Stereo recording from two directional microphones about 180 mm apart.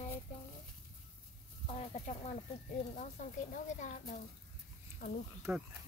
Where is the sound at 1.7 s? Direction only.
40° left (ahead or behind).